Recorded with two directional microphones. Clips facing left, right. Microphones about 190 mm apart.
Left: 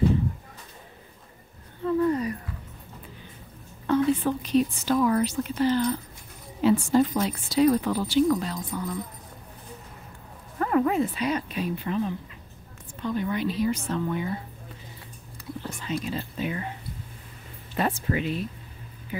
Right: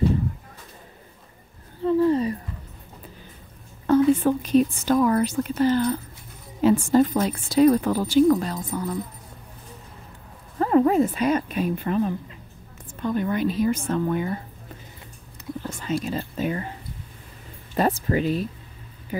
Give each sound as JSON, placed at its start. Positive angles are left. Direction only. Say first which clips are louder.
{"t": 1.8, "sound": "a sound", "louder": "right 4 dB", "side_deg": -30}
{"t": 3.8, "sound": "a woman's voice", "louder": "right 5 dB", "side_deg": -45}
{"t": 10.6, "sound": "speech", "louder": "right 5 dB", "side_deg": -30}
{"t": 11.0, "sound": "a woman's voice", "louder": "right 5 dB", "side_deg": -45}
{"t": 15.8, "sound": "speech", "louder": "right 4 dB", "side_deg": -45}
{"t": 17.7, "sound": "speech", "louder": "right 4 dB", "side_deg": -40}